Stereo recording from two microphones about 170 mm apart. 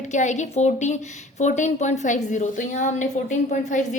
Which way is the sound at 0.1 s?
45° left (ahead or behind).